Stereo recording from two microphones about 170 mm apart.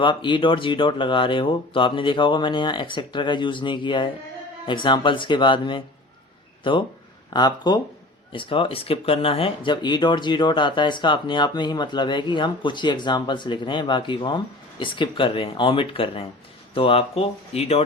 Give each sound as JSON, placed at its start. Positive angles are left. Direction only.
{"t": 0.0, "sound": "speech", "side_deg": 30}